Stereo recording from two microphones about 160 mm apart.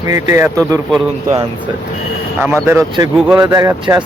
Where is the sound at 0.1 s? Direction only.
20° right (ahead or behind).